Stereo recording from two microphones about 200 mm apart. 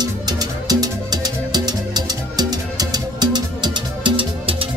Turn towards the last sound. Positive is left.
turn(degrees=-25)  # may be behind; listen again after turning